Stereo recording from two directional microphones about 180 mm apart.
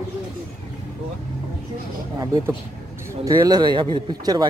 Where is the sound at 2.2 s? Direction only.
15° right (ahead or behind).